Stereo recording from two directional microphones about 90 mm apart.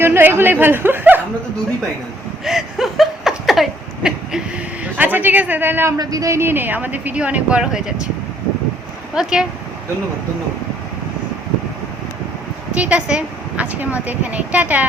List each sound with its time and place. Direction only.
0.0 s speech: 25° right (ahead or behind)
2.4 s a sound: 5° right (ahead or behind)
4.9 s speech: 20° right (ahead or behind)
6.0 s speech: 40° right (ahead or behind); by 7.9 s 10° right (ahead or behind)
9.1 s a woman's voice: 5° right (ahead or behind)
12.7 s a woman's voice: 15° right (ahead or behind)